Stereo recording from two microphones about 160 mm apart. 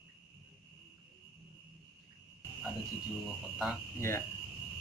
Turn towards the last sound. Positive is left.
turn(degrees=15)  # may be behind; listen again after turning